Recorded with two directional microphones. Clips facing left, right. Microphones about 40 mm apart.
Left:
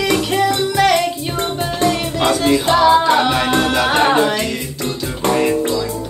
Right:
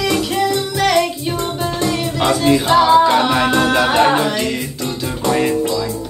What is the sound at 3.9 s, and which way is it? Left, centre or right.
Music, centre.